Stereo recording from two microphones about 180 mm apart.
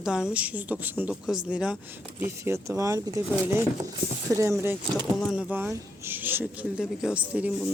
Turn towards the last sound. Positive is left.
turn(degrees=-5)  # may be behind; listen again after turning